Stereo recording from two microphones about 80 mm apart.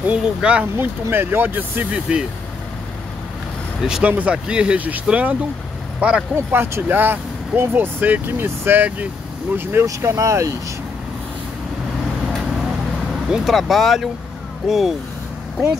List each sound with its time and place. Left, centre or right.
0.0 s speech: centre
0.7 s speech: right; by 2.2 s centre
3.8 s speech: centre
6.3 s speech: right
9.8 s speech: right
13.3 s speech: centre